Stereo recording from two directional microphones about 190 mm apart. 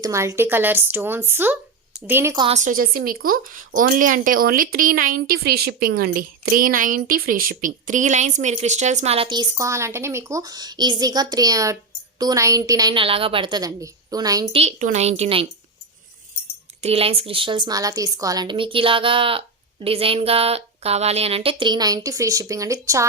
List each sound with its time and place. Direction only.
0.0 s speech: 15° right (ahead or behind)
2.4 s a woman's voice: 35° right (ahead or behind); by 14.5 s 20° right (ahead or behind)
14.5 s speech: 35° right (ahead or behind)
16.8 s a woman's voice: 30° right (ahead or behind)